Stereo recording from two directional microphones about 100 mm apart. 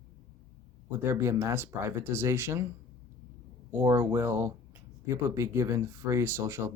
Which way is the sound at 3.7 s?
30° right (ahead or behind).